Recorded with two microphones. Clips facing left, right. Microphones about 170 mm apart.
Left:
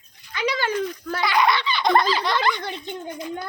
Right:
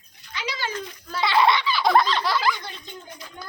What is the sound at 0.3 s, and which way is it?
Dog, 55° left (ahead or behind).